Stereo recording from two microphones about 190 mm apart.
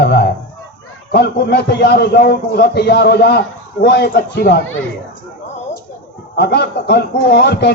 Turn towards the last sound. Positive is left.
turn(degrees=60)  # may be behind; listen again after turning